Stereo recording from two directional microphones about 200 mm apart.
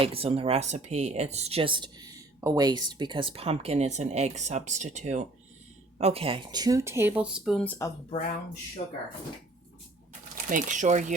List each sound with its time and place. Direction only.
0.0 s speech: 30° right (ahead or behind); by 7.9 s 5° left (ahead or behind)
8.8 s speech: 40° left (ahead or behind)
10.3 s speech: 40° right (ahead or behind)